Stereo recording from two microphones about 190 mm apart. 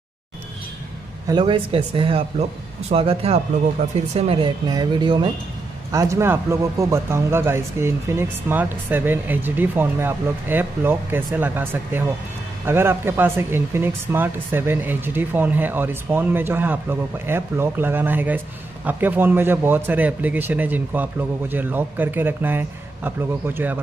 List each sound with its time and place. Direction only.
1.2 s speech: 25° right (ahead or behind)